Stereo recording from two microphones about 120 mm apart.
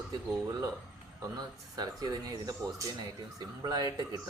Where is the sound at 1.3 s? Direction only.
35° right (ahead or behind).